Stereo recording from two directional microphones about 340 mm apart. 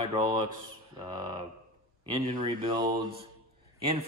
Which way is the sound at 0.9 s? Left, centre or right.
Centre.